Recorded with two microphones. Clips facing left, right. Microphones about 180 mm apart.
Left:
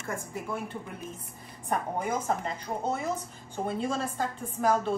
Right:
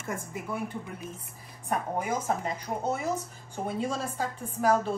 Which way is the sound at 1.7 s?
10° right (ahead or behind).